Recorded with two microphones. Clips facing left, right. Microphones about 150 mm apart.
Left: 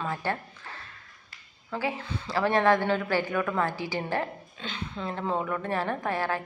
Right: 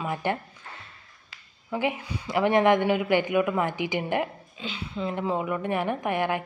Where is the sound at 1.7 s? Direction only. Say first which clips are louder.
Right 3 dB; 15° right (ahead or behind).